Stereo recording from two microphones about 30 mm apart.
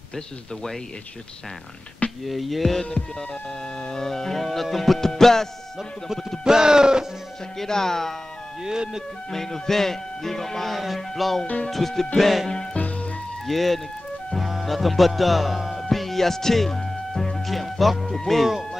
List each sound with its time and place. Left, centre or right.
2.2 s music: centre
3.9 s speech: centre
4.4 s music: centre
6.4 s speech: right
7.5 s speech: centre
8.6 s speech: right
9.3 s speech: centre
10.8 s music: centre
11.7 s speech: centre
12.2 s music: centre
13.5 s music: centre
14.4 s music: centre
14.7 s music: centre
15.8 s music: centre